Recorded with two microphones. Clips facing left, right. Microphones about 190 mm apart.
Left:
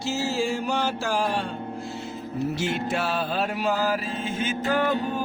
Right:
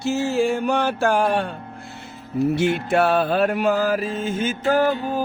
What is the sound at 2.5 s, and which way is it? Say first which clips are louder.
Music: right 7 dB; 60° right (ahead or behind).